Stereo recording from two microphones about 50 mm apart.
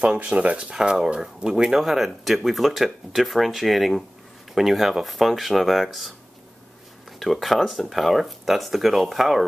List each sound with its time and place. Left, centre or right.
0.0 s speech: right
0.6 s speech: centre